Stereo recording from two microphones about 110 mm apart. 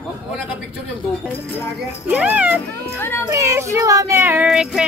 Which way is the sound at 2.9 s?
20° left (ahead or behind).